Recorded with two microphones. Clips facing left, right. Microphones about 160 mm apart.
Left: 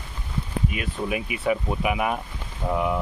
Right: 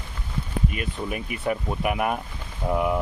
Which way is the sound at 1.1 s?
5° left (ahead or behind).